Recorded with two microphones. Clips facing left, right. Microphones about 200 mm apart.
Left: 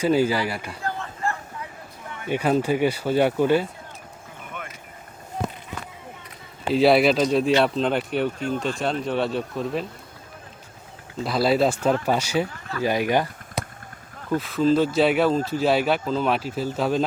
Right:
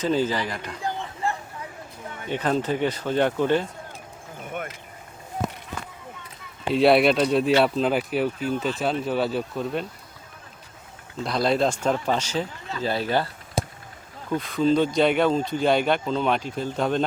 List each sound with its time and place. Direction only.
0.0 s speech: 10° left (ahead or behind)
0.8 s a sound: 15° right (ahead or behind)
2.3 s speech: 10° left (ahead or behind)
6.7 s speech: centre (ahead or behind)
11.2 s speech: 5° left (ahead or behind)
14.3 s speech: 5° left (ahead or behind)